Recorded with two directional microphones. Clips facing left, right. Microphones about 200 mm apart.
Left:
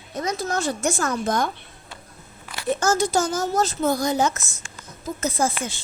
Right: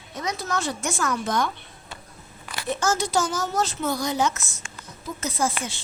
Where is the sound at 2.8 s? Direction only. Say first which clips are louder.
Left 2 dB; 50° left (ahead or behind).